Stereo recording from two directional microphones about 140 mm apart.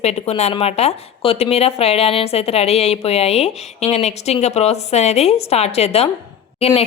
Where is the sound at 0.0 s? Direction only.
50° left (ahead or behind).